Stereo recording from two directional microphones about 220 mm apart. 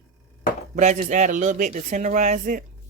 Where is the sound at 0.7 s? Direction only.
35° right (ahead or behind).